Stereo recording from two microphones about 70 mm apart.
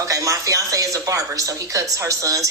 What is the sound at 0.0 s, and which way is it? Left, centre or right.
A woman's voice, right.